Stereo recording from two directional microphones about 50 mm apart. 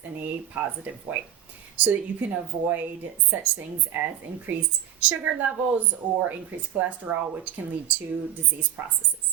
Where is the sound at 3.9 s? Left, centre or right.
Right.